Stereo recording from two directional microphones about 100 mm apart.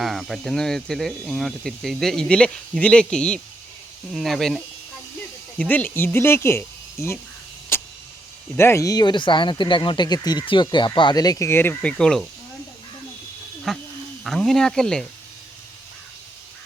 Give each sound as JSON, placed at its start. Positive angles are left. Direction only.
{"t": 0.0, "sound": "speech", "side_deg": 0}
{"t": 5.5, "sound": "speech", "side_deg": 15}
{"t": 7.7, "sound": "vehicle", "side_deg": 25}
{"t": 8.5, "sound": "speech", "side_deg": 25}
{"t": 11.4, "sound": "speech", "side_deg": 20}
{"t": 11.9, "sound": "speech", "side_deg": 5}
{"t": 13.7, "sound": "speech", "side_deg": 0}